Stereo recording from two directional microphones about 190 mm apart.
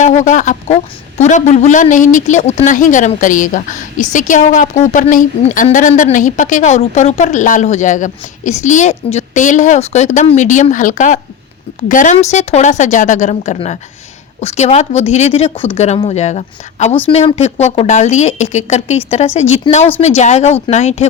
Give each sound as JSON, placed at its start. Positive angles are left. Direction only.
{"t": 0.0, "sound": "a man's voice", "side_deg": 40}